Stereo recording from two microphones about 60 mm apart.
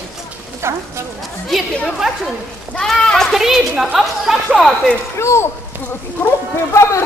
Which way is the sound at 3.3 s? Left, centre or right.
Centre.